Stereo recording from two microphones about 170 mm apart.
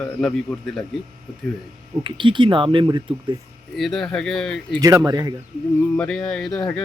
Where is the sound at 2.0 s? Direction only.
30° right (ahead or behind).